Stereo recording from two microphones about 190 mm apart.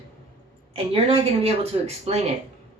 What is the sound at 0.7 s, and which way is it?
Speech, 30° right (ahead or behind).